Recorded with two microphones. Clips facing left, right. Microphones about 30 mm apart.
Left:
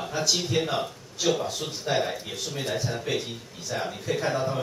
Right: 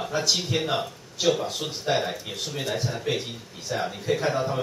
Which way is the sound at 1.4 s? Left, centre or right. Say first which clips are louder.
Right 2 dB; right.